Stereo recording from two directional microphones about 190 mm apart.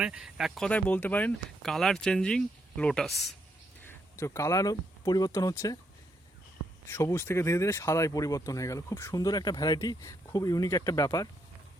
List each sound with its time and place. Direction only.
0.0 s speech: 5° right (ahead or behind)
3.8 s speech: 15° left (ahead or behind)
6.8 s speech: 15° left (ahead or behind)